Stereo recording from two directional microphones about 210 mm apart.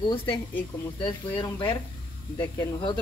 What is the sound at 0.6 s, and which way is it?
Speech, 10° left (ahead or behind).